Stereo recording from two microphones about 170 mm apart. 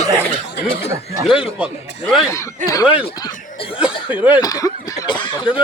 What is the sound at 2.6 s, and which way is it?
Speech, 45° right (ahead or behind).